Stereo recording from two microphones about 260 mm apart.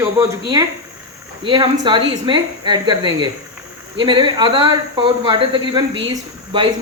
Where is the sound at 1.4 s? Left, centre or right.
Centre.